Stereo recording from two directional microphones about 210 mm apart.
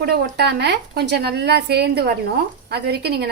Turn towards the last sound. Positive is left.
turn(degrees=-50)  # may be behind; listen again after turning